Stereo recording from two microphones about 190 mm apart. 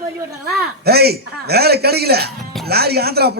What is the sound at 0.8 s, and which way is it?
Speech, 55° right (ahead or behind).